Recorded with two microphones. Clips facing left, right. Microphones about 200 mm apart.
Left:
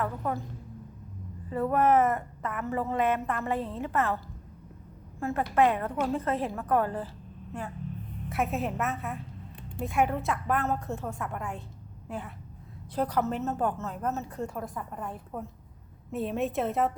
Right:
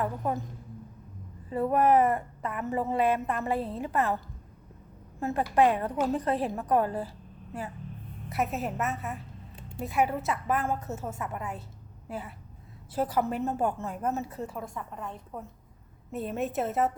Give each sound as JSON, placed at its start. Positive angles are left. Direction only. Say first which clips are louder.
{"t": 0.0, "sound": "a woman's voice", "louder": "right 1 dB", "side_deg": -20}
{"t": 1.5, "sound": "a woman's voice", "louder": "right 1 dB", "side_deg": -15}
{"t": 5.2, "sound": "a woman's voice", "louder": "right 1 dB", "side_deg": -15}
{"t": 8.3, "sound": "a woman's voice", "louder": "left 1 dB", "side_deg": 0}